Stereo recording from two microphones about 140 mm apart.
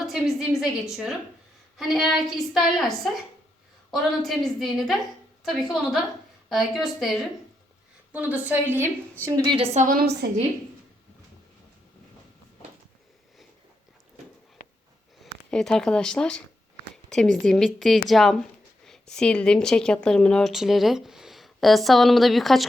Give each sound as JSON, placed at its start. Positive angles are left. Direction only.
{"t": 0.0, "sound": "speech", "side_deg": 0}
{"t": 8.1, "sound": "a woman's voice", "side_deg": -10}
{"t": 9.2, "sound": "a woman's voice", "side_deg": -25}
{"t": 9.7, "sound": "a woman's voice", "side_deg": -75}
{"t": 15.2, "sound": "speech", "side_deg": 5}